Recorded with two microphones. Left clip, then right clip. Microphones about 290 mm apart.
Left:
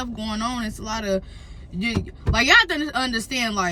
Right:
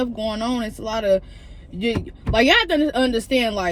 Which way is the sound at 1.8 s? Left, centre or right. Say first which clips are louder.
Right 3 dB; left.